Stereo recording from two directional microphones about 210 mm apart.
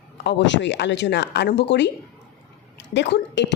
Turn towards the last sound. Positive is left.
turn(degrees=55)  # may be behind; listen again after turning